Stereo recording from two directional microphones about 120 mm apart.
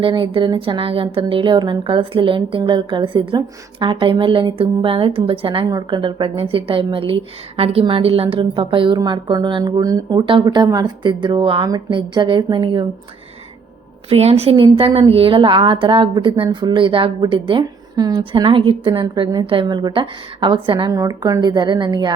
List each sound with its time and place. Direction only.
0.0 s speech: 45° right (ahead or behind)
5.6 s speech: 35° right (ahead or behind)
14.1 s a woman's voice: 60° right (ahead or behind)
14.5 s speech: 50° right (ahead or behind)
19.0 s speech: 40° right (ahead or behind)